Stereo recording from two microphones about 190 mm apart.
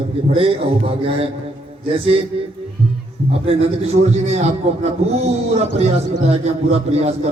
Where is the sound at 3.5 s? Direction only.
30° right (ahead or behind).